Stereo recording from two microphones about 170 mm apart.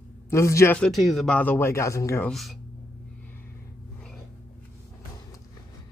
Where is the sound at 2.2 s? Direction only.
Centre (ahead or behind).